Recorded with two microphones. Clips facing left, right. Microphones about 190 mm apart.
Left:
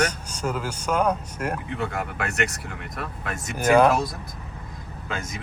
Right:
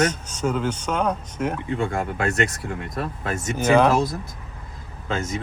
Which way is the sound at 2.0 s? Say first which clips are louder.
Right 4 dB; 25° right (ahead or behind).